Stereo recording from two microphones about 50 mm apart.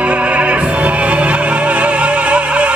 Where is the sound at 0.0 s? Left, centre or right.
Right.